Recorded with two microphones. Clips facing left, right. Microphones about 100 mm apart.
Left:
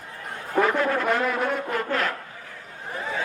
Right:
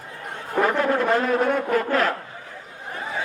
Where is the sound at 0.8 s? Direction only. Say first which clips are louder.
Right 2 dB; 35° right (ahead or behind).